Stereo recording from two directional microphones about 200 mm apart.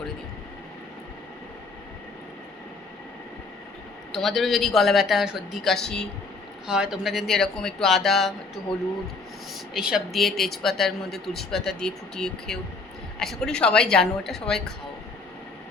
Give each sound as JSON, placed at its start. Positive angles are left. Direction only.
{"t": 4.1, "sound": "speech", "side_deg": 0}
{"t": 9.7, "sound": "speech", "side_deg": -5}